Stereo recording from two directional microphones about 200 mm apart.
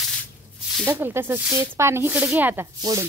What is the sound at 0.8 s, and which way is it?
Speech, 10° right (ahead or behind).